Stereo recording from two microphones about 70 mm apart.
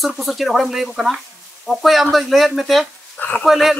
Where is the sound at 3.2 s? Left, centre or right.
Left.